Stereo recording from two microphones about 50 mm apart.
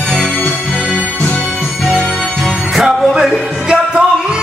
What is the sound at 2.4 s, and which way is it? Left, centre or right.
Music, centre.